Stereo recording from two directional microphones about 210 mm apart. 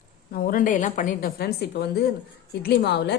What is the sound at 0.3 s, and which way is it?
Speech, 40° left (ahead or behind).